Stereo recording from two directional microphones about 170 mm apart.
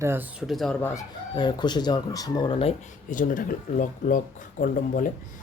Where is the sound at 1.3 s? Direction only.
25° left (ahead or behind).